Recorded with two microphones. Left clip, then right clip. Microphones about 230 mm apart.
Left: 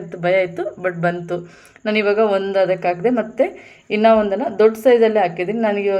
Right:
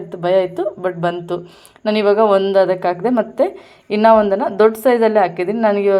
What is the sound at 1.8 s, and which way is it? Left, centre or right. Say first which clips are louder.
A woman's voice: right 3 dB; centre.